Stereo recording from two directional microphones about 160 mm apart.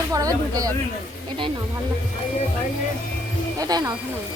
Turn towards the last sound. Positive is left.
turn(degrees=-25)  # may be behind; listen again after turning